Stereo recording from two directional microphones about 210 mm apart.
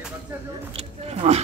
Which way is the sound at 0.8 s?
30° right (ahead or behind).